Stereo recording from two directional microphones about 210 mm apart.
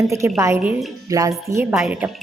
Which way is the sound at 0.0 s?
15° right (ahead or behind).